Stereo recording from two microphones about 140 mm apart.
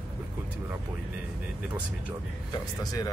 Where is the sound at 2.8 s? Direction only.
25° left (ahead or behind).